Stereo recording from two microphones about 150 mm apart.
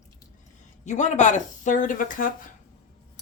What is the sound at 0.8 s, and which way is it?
Speech, 50° left (ahead or behind).